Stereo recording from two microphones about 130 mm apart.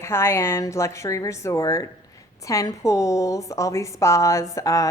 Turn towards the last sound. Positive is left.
turn(degrees=25)  # may be behind; listen again after turning